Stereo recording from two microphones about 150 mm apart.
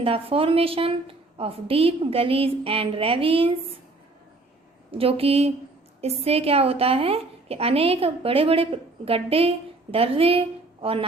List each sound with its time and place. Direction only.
0.0 s a woman's voice: 40° right (ahead or behind)
4.9 s a woman's voice: 40° right (ahead or behind)